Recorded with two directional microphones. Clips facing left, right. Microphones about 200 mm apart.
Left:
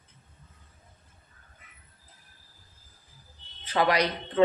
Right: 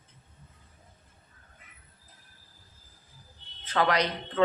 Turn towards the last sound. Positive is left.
turn(degrees=10)  # may be behind; listen again after turning